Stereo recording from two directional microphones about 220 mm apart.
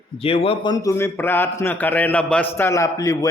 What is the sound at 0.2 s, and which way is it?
A man's voice, 25° left (ahead or behind).